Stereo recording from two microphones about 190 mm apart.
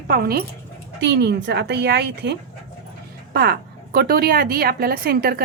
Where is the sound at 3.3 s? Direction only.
55° right (ahead or behind).